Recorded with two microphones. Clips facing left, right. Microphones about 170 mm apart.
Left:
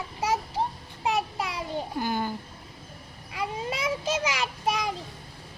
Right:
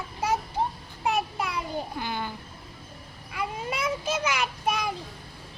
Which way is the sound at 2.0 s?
45° left (ahead or behind).